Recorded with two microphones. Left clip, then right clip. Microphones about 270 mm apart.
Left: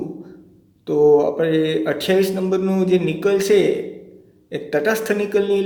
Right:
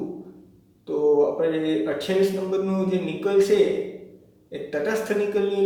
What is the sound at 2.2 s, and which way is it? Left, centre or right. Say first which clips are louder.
A man's voice: left 4 dB; left.